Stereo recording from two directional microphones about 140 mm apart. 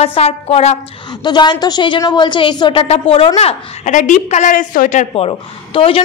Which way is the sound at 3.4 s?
50° left (ahead or behind).